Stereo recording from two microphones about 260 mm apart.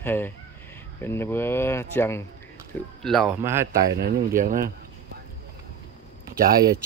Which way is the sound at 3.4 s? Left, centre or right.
Centre.